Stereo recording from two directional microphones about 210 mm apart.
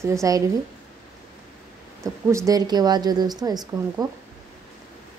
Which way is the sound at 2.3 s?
15° right (ahead or behind).